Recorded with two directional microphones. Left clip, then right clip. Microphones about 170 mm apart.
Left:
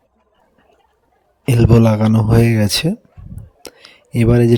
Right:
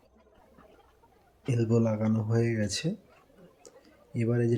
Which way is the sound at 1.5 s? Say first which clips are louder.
Left 14 dB; 60° left (ahead or behind).